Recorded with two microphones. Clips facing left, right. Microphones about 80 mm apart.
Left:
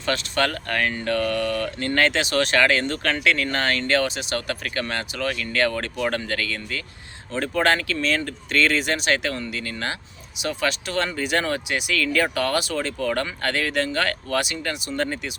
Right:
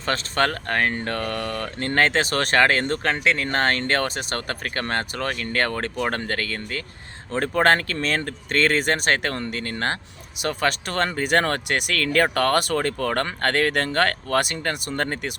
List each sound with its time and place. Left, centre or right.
0.0 s speech: right